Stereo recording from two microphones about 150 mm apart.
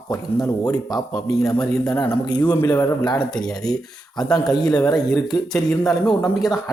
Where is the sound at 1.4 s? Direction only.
5° left (ahead or behind).